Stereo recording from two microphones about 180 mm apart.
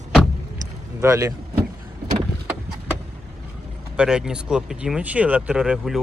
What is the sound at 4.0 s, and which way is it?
Speech, 5° right (ahead or behind).